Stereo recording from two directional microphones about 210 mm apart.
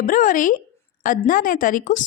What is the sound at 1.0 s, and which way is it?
Speech, 40° left (ahead or behind).